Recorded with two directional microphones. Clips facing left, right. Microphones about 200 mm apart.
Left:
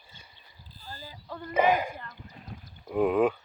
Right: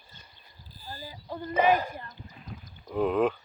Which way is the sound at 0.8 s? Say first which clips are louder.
Right 2 dB; 10° right (ahead or behind).